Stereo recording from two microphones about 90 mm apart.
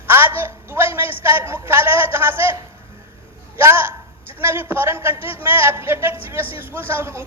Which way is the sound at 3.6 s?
25° right (ahead or behind).